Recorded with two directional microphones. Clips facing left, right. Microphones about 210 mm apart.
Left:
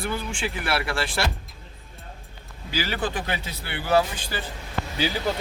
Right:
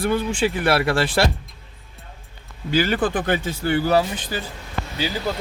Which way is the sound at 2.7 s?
50° right (ahead or behind).